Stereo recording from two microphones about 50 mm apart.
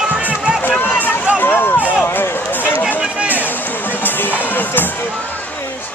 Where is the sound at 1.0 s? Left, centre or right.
Left.